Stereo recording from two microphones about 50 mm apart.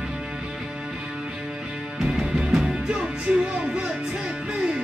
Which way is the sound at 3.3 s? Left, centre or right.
Right.